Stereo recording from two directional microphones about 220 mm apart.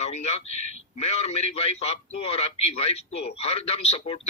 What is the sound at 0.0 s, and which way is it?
A man's voice, 30° left (ahead or behind).